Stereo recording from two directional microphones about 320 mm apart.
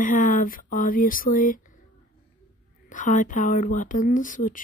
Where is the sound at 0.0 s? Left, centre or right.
Left.